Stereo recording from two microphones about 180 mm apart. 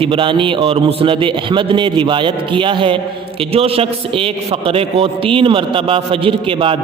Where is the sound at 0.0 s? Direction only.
30° right (ahead or behind).